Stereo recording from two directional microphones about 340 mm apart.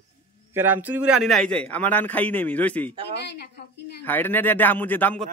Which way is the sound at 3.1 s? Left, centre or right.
Left.